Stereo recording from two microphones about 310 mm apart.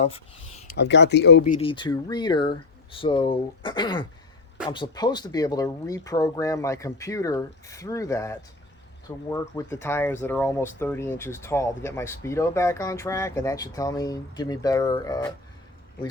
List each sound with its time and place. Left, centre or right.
0.7 s speech: left
1.5 s speech: centre